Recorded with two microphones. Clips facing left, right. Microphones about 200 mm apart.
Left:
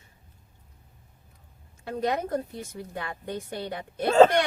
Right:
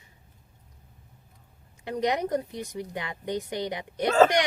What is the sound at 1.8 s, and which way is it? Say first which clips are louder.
Speech: right 1 dB; 15° right (ahead or behind).